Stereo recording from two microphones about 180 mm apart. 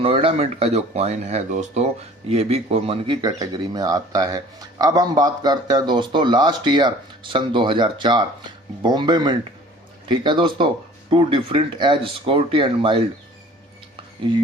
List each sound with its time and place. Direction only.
0.0 s speech: 30° right (ahead or behind)